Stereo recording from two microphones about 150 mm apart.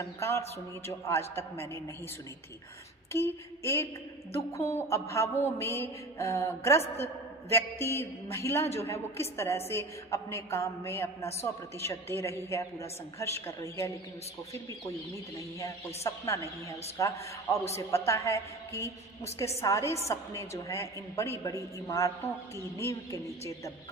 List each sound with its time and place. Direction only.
0.0 s a woman's voice: 15° left (ahead or behind)
3.1 s a woman's voice: 15° left (ahead or behind)